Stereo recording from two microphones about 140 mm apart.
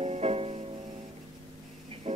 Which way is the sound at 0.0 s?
50° right (ahead or behind).